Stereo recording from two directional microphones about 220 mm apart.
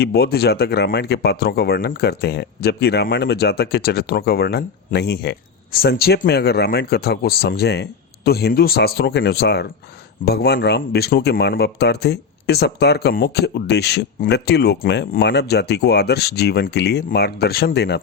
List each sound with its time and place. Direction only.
0.0 s speech: 45° left (ahead or behind)